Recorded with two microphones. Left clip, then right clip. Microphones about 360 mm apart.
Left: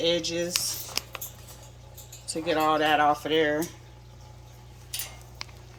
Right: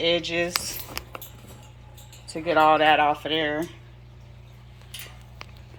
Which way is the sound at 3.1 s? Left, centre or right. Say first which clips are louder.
Left 1 dB; centre.